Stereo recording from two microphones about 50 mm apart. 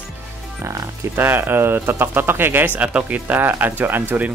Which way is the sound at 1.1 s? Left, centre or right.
Right.